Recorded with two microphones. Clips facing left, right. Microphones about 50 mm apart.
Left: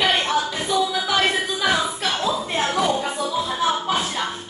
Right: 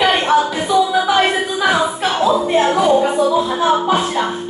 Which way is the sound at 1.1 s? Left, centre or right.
Centre.